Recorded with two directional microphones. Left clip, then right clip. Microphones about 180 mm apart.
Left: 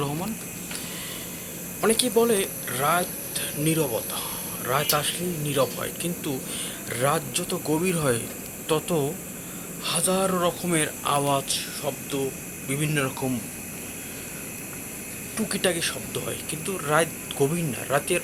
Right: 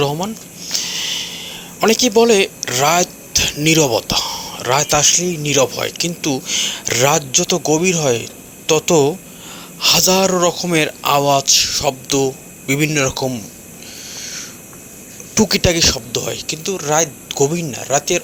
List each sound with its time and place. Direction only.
0.8 s a sound: 40° right (ahead or behind)
1.8 s speech: 35° right (ahead or behind)
15.4 s speech: 40° right (ahead or behind); by 18.2 s 25° right (ahead or behind)